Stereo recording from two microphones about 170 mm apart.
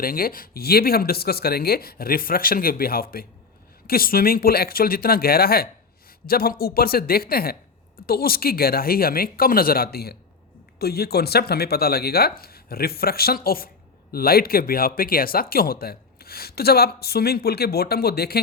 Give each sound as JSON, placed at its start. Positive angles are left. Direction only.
{"t": 0.0, "sound": "speech", "side_deg": 60}